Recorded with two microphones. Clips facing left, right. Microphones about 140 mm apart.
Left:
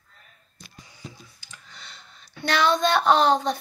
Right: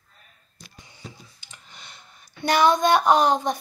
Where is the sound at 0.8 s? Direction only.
25° right (ahead or behind).